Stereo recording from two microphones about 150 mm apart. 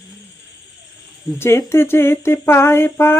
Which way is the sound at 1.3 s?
15° left (ahead or behind).